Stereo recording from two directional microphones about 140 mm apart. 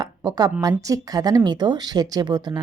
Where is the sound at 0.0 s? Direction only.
30° right (ahead or behind).